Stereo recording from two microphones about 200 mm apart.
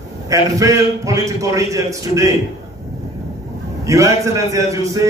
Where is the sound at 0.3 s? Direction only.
15° right (ahead or behind).